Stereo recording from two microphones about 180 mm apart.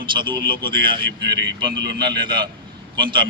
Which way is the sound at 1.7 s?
75° right (ahead or behind).